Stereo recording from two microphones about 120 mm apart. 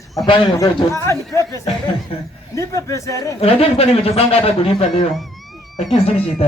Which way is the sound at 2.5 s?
25° left (ahead or behind).